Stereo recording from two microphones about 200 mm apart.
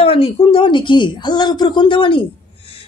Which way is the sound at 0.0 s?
30° left (ahead or behind).